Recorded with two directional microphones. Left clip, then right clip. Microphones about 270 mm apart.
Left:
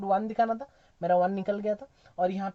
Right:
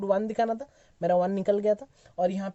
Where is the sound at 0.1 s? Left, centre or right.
Right.